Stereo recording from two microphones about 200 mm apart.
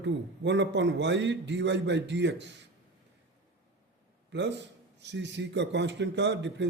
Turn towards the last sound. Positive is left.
turn(degrees=-60)  # may be behind; listen again after turning